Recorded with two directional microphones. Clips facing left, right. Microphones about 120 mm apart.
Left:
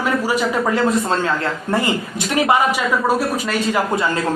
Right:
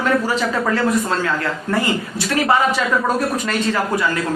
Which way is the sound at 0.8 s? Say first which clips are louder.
Left 1 dB; 25° left (ahead or behind).